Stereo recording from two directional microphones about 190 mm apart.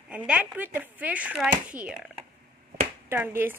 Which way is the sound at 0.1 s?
5° right (ahead or behind).